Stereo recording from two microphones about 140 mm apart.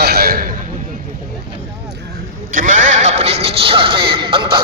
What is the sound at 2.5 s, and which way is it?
Speech, 70° right (ahead or behind).